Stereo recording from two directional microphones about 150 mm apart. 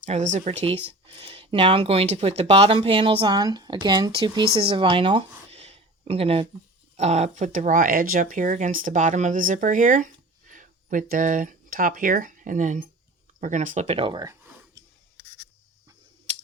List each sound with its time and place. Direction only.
0.0 s speech: 55° right (ahead or behind); by 14.3 s 30° right (ahead or behind)